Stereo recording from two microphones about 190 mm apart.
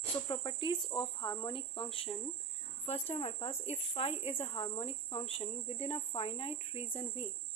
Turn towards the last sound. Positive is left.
turn(degrees=30)  # may be behind; listen again after turning